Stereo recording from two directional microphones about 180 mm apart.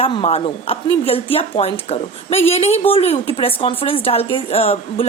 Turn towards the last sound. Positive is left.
turn(degrees=30)  # may be behind; listen again after turning